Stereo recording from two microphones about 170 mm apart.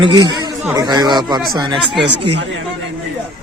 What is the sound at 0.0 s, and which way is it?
Speech, 25° right (ahead or behind).